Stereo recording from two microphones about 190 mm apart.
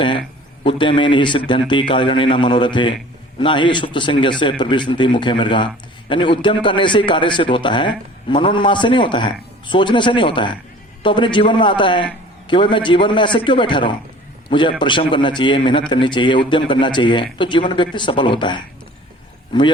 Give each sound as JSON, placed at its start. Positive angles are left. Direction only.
{"t": 0.6, "sound": "a man's voice", "side_deg": 25}